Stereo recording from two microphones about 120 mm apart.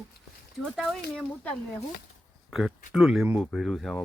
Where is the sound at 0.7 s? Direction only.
Centre (ahead or behind).